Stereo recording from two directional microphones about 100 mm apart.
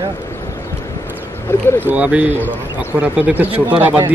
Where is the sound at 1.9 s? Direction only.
15° right (ahead or behind).